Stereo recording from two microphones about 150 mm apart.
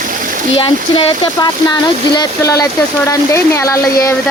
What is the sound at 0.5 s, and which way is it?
Speech, 40° left (ahead or behind).